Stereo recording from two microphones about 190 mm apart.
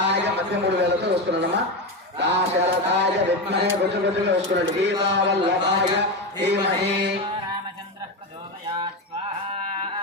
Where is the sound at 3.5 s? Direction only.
60° right (ahead or behind).